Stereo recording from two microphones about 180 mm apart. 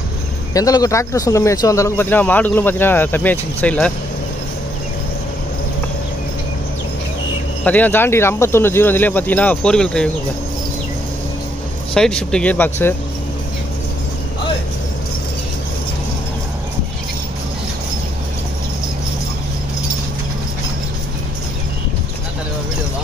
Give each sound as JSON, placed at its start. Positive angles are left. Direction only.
{"t": 0.5, "sound": "speech", "side_deg": 20}
{"t": 7.6, "sound": "speech", "side_deg": 10}
{"t": 11.9, "sound": "speech", "side_deg": 5}